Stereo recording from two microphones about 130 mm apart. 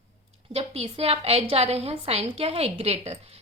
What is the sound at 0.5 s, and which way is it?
A woman's voice, 50° right (ahead or behind).